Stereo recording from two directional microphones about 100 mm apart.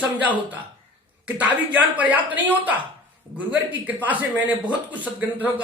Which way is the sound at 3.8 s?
15° right (ahead or behind).